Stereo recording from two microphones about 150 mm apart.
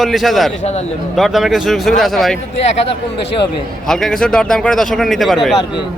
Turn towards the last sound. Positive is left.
turn(degrees=0)  # may be behind; listen again after turning